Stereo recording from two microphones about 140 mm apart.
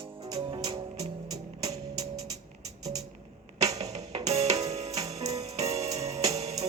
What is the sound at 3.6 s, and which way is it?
Music, 25° right (ahead or behind).